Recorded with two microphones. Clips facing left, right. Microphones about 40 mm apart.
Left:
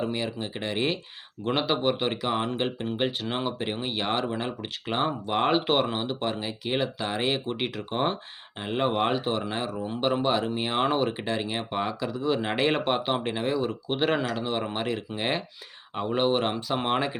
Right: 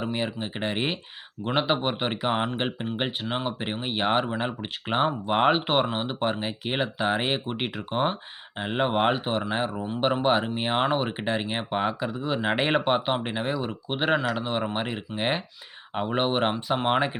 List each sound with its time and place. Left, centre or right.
0.0 s speech: right
3.2 s speech: centre
3.6 s speech: right
7.9 s speech: centre
16.7 s speech: centre